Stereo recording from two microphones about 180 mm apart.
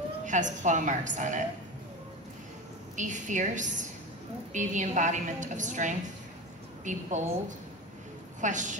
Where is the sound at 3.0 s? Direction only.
45° right (ahead or behind).